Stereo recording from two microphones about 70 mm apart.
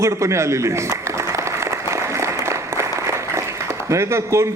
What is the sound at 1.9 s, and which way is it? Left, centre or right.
Applause, right.